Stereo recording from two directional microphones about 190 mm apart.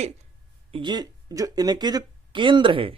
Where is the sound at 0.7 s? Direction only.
25° right (ahead or behind).